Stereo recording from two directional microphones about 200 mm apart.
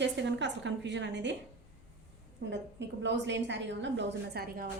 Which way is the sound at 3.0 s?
60° right (ahead or behind).